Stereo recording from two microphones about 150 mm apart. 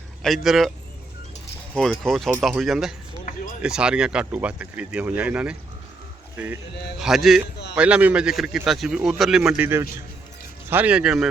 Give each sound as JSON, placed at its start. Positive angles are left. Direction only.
{"t": 0.2, "sound": "a man's voice", "side_deg": 0}
{"t": 1.7, "sound": "a man's voice", "side_deg": 5}
{"t": 3.3, "sound": "a sound", "side_deg": 65}
{"t": 3.6, "sound": "a man's voice", "side_deg": -5}
{"t": 10.7, "sound": "speech", "side_deg": -10}